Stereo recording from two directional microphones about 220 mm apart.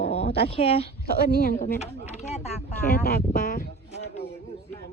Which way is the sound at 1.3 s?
45° left (ahead or behind).